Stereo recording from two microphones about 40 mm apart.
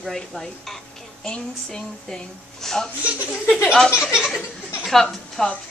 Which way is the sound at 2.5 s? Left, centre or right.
Centre.